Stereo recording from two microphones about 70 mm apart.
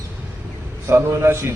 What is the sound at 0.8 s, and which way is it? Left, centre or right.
Speech, right.